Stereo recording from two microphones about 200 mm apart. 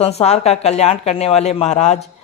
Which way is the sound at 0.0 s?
30° left (ahead or behind).